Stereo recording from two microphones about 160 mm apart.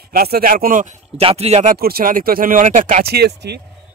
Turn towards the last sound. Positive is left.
turn(degrees=-90)